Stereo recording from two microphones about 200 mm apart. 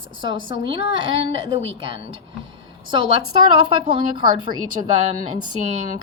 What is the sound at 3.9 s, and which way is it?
Speech, 25° right (ahead or behind).